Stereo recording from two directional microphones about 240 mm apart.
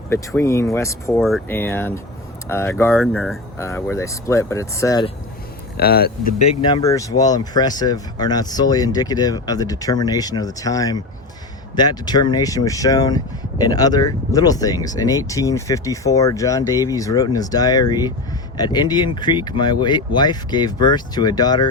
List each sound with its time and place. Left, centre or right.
0.1 s speech: centre
5.7 s speech: left
6.4 s speech: left